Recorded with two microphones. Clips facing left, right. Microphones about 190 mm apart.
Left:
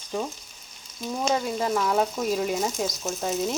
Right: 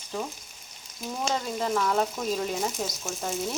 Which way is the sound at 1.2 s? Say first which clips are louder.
Left 3 dB; 10° left (ahead or behind).